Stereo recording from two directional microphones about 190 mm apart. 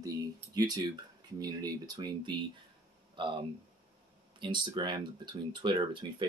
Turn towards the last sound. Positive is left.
turn(degrees=-25)  # may be behind; listen again after turning